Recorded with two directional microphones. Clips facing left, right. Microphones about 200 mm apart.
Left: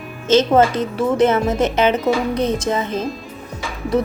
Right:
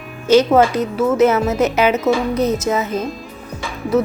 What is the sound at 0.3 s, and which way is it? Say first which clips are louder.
A woman's voice: right 2 dB; 10° right (ahead or behind).